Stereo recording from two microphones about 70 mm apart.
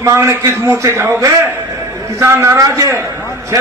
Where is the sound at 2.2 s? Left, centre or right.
Right.